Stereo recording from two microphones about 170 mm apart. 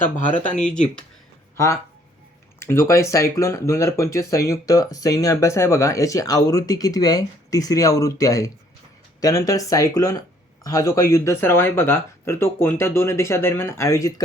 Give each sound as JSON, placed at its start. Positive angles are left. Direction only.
{"t": 0.5, "sound": "speech", "side_deg": 5}
{"t": 1.5, "sound": "speech", "side_deg": 20}